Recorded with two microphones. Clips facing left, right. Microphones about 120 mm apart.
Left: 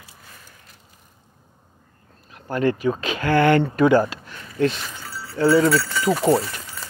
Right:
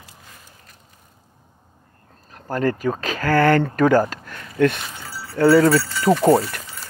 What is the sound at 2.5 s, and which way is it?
Speech, 40° right (ahead or behind).